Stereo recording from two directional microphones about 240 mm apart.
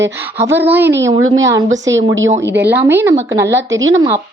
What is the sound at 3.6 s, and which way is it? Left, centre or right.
Speech, right.